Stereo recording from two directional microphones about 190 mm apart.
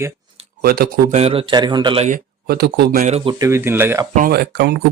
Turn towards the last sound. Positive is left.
turn(degrees=-55)  # may be behind; listen again after turning